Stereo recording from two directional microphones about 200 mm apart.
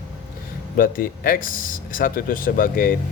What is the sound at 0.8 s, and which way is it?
Speech, 45° left (ahead or behind).